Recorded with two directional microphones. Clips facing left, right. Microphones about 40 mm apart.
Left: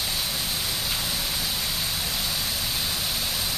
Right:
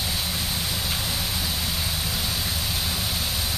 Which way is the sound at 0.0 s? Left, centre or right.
Centre.